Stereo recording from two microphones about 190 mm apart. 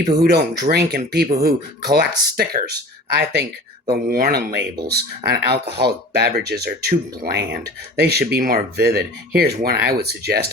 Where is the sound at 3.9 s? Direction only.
55° right (ahead or behind).